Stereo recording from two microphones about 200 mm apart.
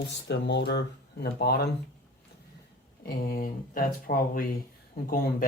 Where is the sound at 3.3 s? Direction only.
45° left (ahead or behind).